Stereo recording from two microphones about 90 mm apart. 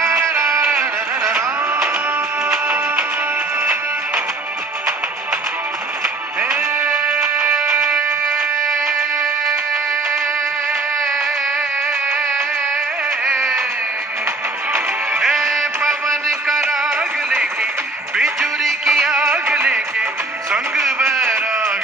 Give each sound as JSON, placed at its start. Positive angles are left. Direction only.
{"t": 0.0, "sound": "music", "side_deg": -35}
{"t": 1.2, "sound": "music", "side_deg": -10}
{"t": 6.8, "sound": "music", "side_deg": -15}
{"t": 13.2, "sound": "a sound", "side_deg": 0}
{"t": 15.1, "sound": "music", "side_deg": -5}
{"t": 18.1, "sound": "music", "side_deg": -5}
{"t": 20.5, "sound": "a sound", "side_deg": -5}